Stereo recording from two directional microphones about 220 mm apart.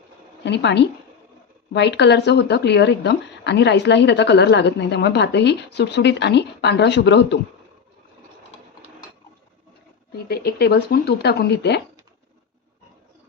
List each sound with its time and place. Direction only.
0.4 s speech: 50° left (ahead or behind)
10.2 s speech: 45° left (ahead or behind)